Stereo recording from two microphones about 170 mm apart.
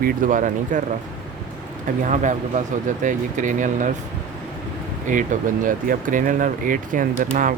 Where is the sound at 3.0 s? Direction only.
50° right (ahead or behind).